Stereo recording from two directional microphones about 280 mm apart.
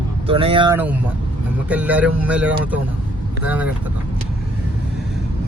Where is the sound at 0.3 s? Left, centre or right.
Centre.